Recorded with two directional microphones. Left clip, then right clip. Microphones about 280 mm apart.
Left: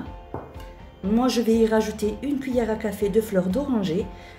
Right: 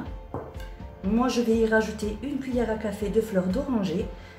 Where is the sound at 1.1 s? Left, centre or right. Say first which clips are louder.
Left 3 dB; left.